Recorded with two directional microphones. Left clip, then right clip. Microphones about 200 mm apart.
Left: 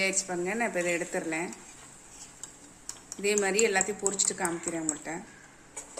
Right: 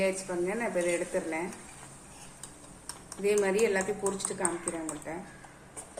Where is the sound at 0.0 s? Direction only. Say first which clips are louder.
Even; 55° left (ahead or behind).